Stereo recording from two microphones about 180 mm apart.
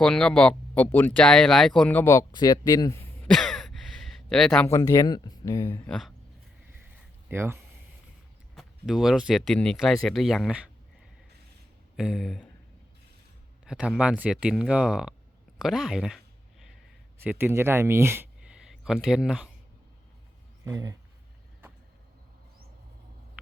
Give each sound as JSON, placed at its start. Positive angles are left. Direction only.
{"t": 0.0, "sound": "speech", "side_deg": 5}
{"t": 4.6, "sound": "speech", "side_deg": 20}
{"t": 7.3, "sound": "speech", "side_deg": -15}
{"t": 8.5, "sound": "speech", "side_deg": 0}
{"t": 11.9, "sound": "speech", "side_deg": 0}
{"t": 13.7, "sound": "speech", "side_deg": -5}
{"t": 15.5, "sound": "a sound", "side_deg": 0}
{"t": 17.2, "sound": "speech", "side_deg": -10}
{"t": 20.7, "sound": "speech", "side_deg": -20}